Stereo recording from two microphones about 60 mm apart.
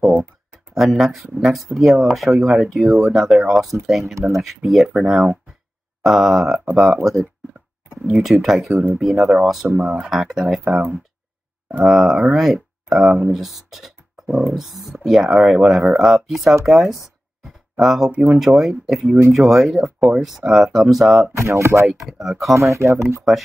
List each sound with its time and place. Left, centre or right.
0.7 s speech: centre
8.1 s speech: centre
9.8 s speech: centre
10.1 s speech: centre
11.8 s speech: centre
21.4 s speech: right
21.8 s speech: centre
22.5 s speech: right
23.3 s speech: centre